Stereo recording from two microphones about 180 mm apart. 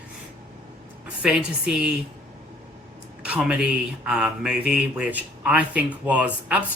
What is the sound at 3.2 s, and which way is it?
A man's voice, 5° right (ahead or behind).